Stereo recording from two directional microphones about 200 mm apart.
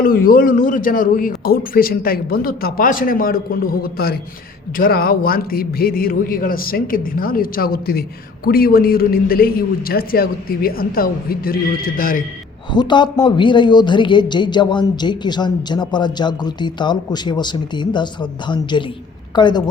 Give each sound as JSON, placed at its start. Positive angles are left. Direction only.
{"t": 0.0, "sound": "a man's voice", "side_deg": 45}
{"t": 12.7, "sound": "speech", "side_deg": 20}